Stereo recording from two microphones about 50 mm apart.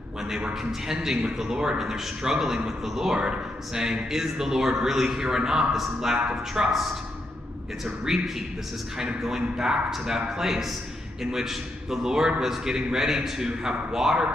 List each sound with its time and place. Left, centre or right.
0.5 s a man's voice: centre
7.8 s a man's voice: centre